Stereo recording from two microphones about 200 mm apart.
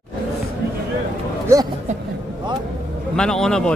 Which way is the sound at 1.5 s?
15° right (ahead or behind).